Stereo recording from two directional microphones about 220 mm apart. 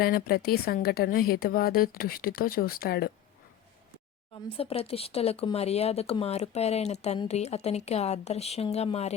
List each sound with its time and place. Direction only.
0.0 s a woman's voice: 45° left (ahead or behind)
4.4 s speech: 25° left (ahead or behind)